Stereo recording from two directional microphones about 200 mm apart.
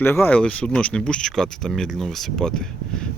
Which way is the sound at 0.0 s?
10° left (ahead or behind).